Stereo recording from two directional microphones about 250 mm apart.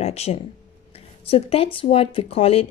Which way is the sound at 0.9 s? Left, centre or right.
Left.